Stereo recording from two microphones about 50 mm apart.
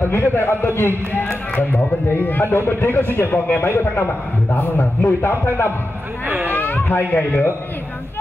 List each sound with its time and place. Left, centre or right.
0.1 s a man's voice: left
1.2 s speech: left
1.7 s a man's voice: left
4.7 s a man's voice: left
6.2 s speech: right
6.5 s speech: left